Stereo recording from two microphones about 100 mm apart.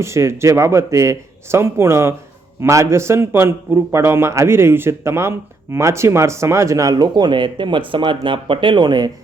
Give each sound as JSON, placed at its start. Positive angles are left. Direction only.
{"t": 0.0, "sound": "a man's voice", "side_deg": -30}